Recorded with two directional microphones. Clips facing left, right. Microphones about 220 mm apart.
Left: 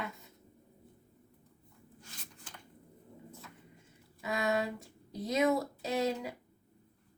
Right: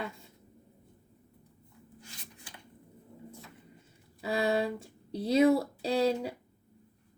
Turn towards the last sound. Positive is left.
turn(degrees=-30)  # may be behind; listen again after turning